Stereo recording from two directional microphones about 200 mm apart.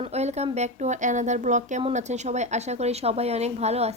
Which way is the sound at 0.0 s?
35° right (ahead or behind).